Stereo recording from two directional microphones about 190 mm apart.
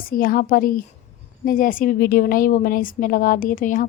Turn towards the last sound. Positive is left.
turn(degrees=45)  # may be behind; listen again after turning